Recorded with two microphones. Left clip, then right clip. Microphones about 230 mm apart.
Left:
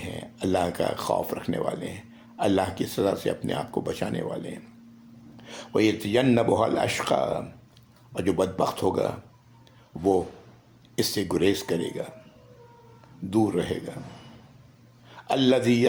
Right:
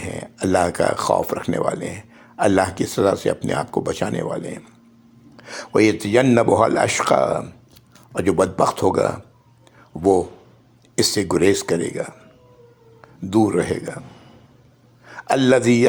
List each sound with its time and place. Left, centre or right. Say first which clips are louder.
0.0 s speech: right 6 dB; right
13.3 s speech: right 7 dB; right
15.0 s a man's voice: right 6 dB; right